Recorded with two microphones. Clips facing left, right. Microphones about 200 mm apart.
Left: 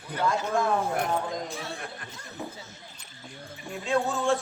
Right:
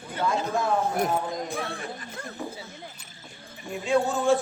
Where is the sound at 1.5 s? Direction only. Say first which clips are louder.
Right 4 dB; 55° right (ahead or behind).